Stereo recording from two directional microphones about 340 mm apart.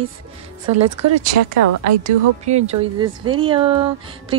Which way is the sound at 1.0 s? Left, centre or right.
Right.